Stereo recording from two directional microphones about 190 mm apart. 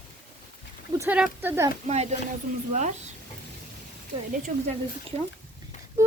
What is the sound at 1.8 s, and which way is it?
Speech, 35° right (ahead or behind).